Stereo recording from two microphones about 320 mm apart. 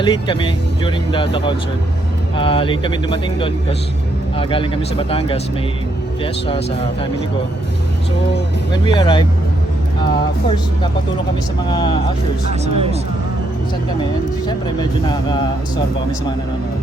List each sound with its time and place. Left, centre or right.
0.0 s speech: centre
8.7 s speech: centre
11.7 s speech: centre
12.6 s speech: centre
14.0 s speech: centre